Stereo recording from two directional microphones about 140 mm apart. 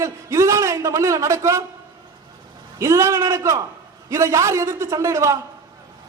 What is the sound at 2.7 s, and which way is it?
A man's voice, 20° right (ahead or behind).